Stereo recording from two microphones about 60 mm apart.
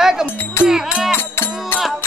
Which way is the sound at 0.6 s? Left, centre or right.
Left.